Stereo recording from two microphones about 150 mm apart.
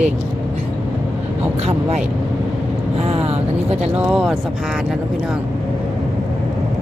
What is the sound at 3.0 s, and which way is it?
Speech, 40° right (ahead or behind).